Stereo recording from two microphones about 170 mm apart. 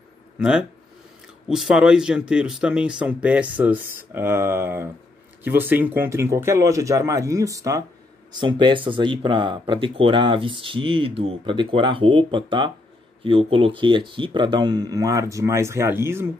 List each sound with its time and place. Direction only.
0.4 s speech: 5° right (ahead or behind)